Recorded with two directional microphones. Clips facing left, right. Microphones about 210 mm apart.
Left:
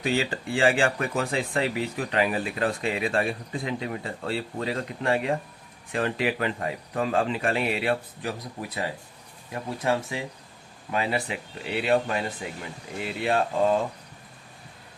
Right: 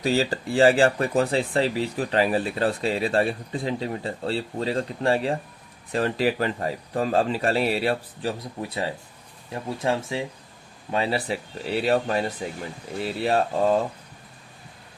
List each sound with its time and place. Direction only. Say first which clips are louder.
0.0 s speech: right 3 dB; 40° right (ahead or behind)